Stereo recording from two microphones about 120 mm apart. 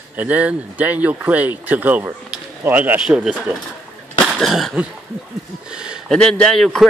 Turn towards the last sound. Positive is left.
turn(degrees=5)  # may be behind; listen again after turning